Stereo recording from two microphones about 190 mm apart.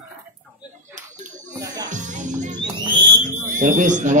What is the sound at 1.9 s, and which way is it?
Music, 40° right (ahead or behind).